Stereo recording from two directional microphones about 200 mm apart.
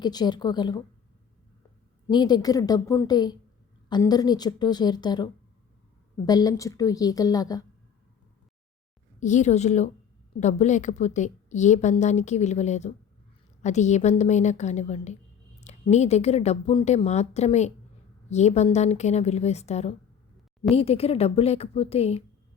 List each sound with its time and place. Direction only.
0.0 s a woman's voice: 20° left (ahead or behind)
2.0 s a woman's voice: 20° left (ahead or behind)
9.2 s a woman's voice: 35° left (ahead or behind)